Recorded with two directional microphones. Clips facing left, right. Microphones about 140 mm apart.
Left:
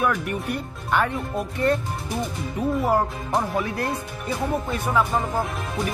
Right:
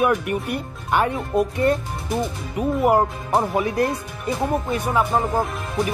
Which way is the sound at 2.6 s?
10° right (ahead or behind).